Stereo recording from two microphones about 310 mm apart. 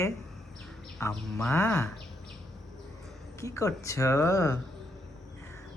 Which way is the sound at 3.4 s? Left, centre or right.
Centre.